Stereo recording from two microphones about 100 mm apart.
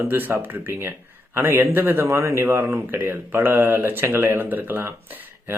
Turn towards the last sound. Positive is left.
turn(degrees=-20)  # may be behind; listen again after turning